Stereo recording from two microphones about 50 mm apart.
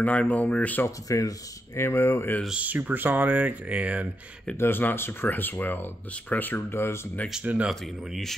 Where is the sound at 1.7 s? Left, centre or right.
Left.